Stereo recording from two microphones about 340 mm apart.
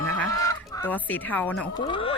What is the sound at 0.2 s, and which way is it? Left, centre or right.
Fowl, centre.